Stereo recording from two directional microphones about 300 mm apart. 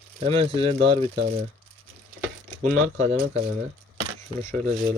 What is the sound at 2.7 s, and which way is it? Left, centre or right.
Speech, centre.